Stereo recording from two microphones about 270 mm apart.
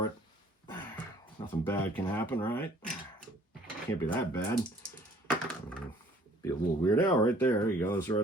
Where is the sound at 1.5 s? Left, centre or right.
Centre.